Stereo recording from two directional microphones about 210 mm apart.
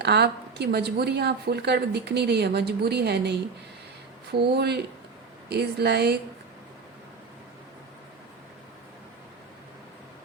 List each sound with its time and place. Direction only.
0.0 s speech: 50° right (ahead or behind)